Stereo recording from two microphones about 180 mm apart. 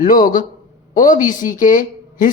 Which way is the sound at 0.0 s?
50° left (ahead or behind).